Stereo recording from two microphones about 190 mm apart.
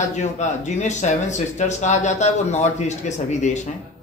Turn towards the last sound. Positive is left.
turn(degrees=40)  # may be behind; listen again after turning